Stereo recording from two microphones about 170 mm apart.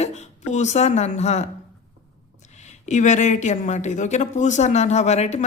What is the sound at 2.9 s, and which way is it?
Speech, 45° left (ahead or behind).